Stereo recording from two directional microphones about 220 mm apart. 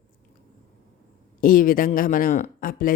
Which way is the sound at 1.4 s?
40° left (ahead or behind).